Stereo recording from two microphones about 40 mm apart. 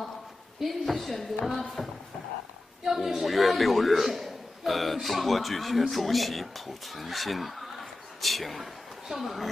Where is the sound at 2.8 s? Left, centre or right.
Centre.